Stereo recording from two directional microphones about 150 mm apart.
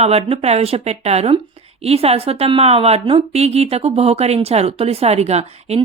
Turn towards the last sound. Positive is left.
turn(degrees=-45)  # may be behind; listen again after turning